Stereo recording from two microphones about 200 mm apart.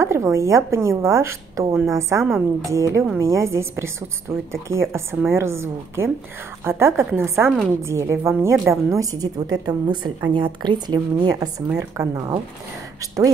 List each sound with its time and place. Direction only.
0.0 s a woman's voice: 15° right (ahead or behind)